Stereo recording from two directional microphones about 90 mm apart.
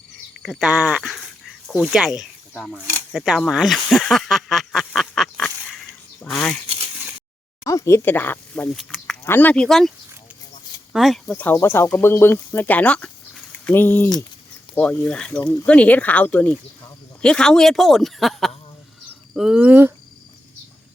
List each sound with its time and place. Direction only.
0.3 s cricket: 5° left (ahead or behind)
0.6 s speech: 10° right (ahead or behind)
3.5 s a sound: centre (ahead or behind)
7.6 s speech: 35° left (ahead or behind); by 8.7 s 20° left (ahead or behind)
8.7 s speech: centre (ahead or behind)
9.2 s speech: 20° left (ahead or behind)
9.6 s speech: 5° left (ahead or behind)
10.9 s speech: centre (ahead or behind)
11.5 s speech: 30° left (ahead or behind); by 19.9 s 15° right (ahead or behind)